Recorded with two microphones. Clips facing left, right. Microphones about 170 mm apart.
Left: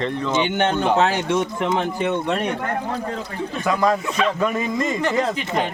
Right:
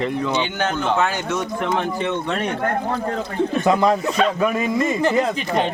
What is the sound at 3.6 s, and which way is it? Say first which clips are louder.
Speech: right 1 dB; 25° right (ahead or behind).